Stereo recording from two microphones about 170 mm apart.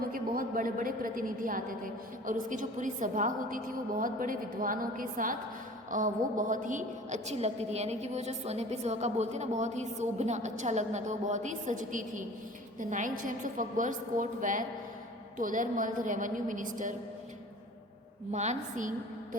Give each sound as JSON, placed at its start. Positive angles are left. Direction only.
{"t": 0.0, "sound": "a woman's voice", "side_deg": -55}
{"t": 18.3, "sound": "a woman's voice", "side_deg": -40}